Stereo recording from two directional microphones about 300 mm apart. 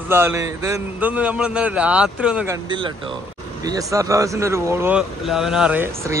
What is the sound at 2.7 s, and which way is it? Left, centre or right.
Speech, centre.